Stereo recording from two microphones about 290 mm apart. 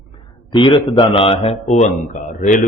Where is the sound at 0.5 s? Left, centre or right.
Centre.